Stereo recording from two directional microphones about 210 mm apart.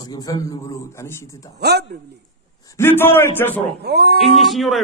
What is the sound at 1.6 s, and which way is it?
Speech, 50° right (ahead or behind).